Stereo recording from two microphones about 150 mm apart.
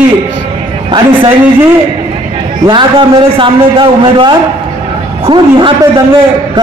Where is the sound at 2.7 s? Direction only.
30° right (ahead or behind).